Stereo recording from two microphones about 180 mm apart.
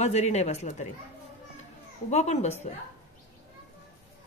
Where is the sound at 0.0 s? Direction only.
40° left (ahead or behind).